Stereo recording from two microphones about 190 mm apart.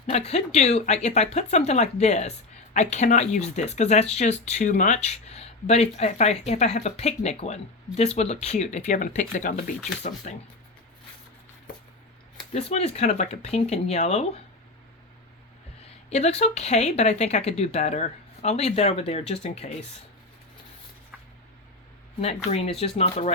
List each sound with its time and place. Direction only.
0.1 s speech: 35° left (ahead or behind)
12.5 s speech: 35° left (ahead or behind)
16.0 s speech: 35° left (ahead or behind)
22.2 s speech: 35° left (ahead or behind)